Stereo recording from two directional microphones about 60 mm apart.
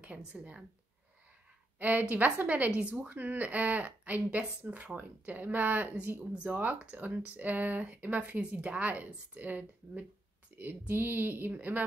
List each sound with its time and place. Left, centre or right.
0.0 s a woman's voice: right
1.8 s a woman's voice: right